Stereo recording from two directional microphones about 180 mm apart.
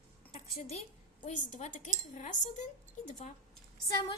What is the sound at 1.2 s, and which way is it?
Speech, 40° left (ahead or behind).